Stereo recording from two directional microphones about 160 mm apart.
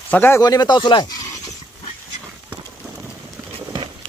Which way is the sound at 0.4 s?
25° left (ahead or behind).